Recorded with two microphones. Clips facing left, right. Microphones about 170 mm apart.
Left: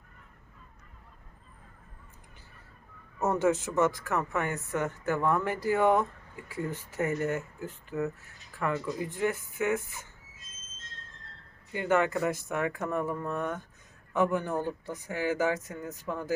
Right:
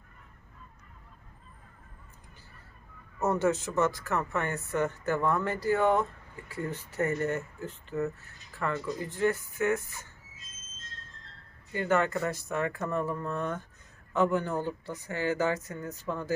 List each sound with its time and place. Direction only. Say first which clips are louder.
3.4 s speech: left 3 dB; 10° left (ahead or behind)
11.7 s speech: left 1 dB; 15° left (ahead or behind)